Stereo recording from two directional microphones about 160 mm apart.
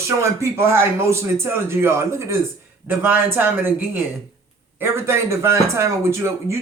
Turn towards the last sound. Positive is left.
turn(degrees=-20)  # may be behind; listen again after turning